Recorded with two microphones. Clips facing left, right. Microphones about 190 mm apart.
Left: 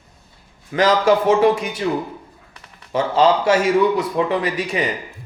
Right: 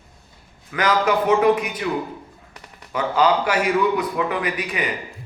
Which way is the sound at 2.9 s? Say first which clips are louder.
Left 3 dB; 25° left (ahead or behind).